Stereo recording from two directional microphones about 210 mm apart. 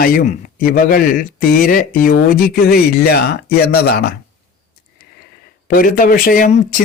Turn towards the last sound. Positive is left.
turn(degrees=40)  # may be behind; listen again after turning